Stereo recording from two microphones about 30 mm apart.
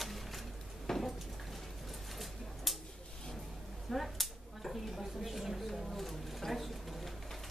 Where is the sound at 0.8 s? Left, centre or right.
Centre.